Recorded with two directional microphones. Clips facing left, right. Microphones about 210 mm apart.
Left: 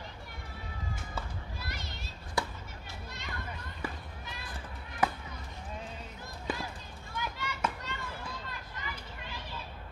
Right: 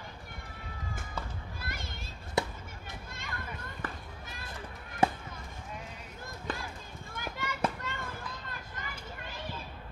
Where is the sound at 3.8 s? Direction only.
10° left (ahead or behind).